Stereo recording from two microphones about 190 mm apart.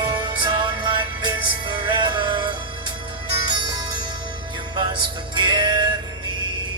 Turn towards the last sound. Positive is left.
turn(degrees=-25)  # may be behind; listen again after turning